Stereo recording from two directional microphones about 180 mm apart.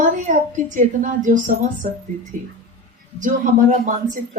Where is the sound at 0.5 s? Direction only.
45° right (ahead or behind).